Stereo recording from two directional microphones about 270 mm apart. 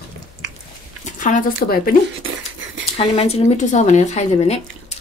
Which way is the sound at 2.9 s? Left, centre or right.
Left.